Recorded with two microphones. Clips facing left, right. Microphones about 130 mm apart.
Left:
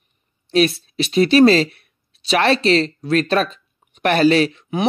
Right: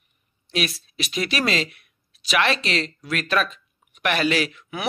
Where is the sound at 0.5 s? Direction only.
30° left (ahead or behind).